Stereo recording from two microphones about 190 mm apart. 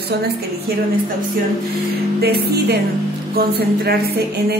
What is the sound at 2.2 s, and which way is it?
A woman's voice, 55° right (ahead or behind).